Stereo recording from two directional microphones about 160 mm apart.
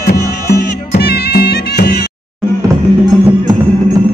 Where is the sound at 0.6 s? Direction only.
75° left (ahead or behind).